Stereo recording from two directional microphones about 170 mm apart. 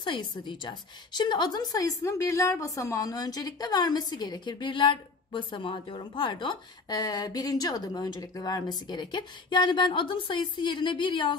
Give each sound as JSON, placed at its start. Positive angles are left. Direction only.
{"t": 0.0, "sound": "a woman's voice", "side_deg": 30}